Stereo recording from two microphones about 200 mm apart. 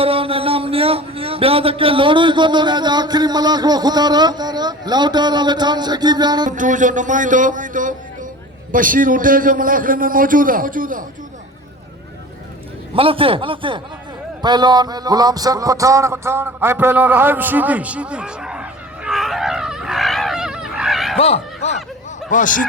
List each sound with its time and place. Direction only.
0.0 s a man's voice: 30° right (ahead or behind)
6.6 s a man's voice: 40° right (ahead or behind)
12.9 s a man's voice: 25° right (ahead or behind)
14.4 s a sound: 20° right (ahead or behind); by 21.2 s centre (ahead or behind)
21.2 s speech: 30° left (ahead or behind)